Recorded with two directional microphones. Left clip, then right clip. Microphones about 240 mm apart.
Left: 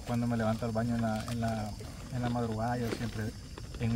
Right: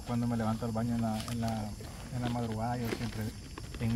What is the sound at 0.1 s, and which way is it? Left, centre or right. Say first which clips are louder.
Speech: left 2 dB; centre.